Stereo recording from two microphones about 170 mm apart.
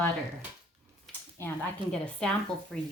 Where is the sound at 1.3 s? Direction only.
10° left (ahead or behind).